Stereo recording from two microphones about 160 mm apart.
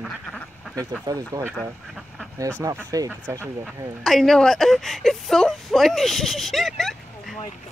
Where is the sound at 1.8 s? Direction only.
Centre (ahead or behind).